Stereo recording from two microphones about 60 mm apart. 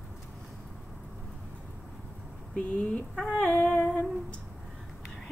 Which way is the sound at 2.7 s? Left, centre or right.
Left.